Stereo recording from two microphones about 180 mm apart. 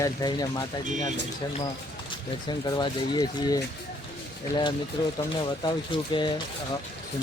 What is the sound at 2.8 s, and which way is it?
Speech, 25° left (ahead or behind).